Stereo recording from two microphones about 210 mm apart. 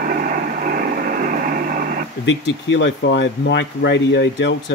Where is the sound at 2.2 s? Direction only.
60° left (ahead or behind).